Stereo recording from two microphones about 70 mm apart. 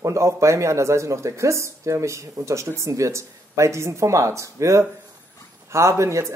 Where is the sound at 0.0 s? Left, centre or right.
Right.